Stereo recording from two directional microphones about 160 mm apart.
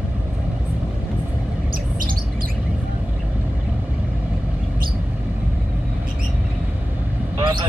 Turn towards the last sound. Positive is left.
turn(degrees=-30)  # may be behind; listen again after turning